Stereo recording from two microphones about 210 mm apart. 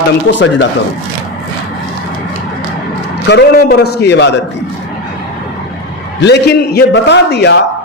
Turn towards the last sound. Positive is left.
turn(degrees=55)  # may be behind; listen again after turning